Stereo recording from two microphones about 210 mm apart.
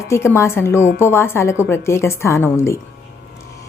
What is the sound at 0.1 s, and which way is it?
A woman's voice, 10° left (ahead or behind).